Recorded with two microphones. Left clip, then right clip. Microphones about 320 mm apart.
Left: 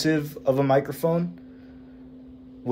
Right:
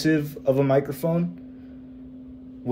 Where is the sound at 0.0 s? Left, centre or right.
Centre.